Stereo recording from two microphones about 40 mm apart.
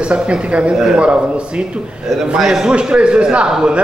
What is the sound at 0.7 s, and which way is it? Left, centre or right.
Speech, centre.